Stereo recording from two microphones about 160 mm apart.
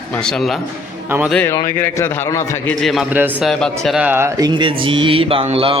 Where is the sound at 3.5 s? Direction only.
5° left (ahead or behind).